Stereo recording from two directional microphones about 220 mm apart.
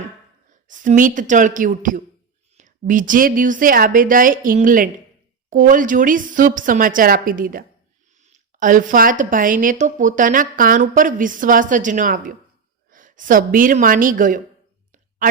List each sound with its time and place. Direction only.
0.7 s a woman's voice: 35° right (ahead or behind)